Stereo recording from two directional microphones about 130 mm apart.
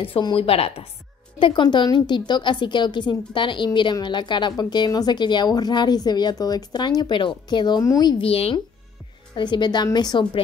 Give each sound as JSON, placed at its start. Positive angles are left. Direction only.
{"t": 0.0, "sound": "a woman's voice", "side_deg": 40}
{"t": 1.4, "sound": "a woman's voice", "side_deg": 35}
{"t": 8.2, "sound": "a woman's voice", "side_deg": 50}
{"t": 9.3, "sound": "a woman's voice", "side_deg": 35}